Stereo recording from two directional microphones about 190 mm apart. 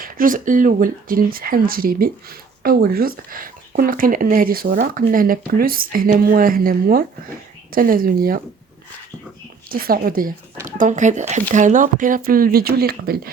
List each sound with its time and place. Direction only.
0.0 s speech: 45° right (ahead or behind)
9.6 s speech: 50° right (ahead or behind)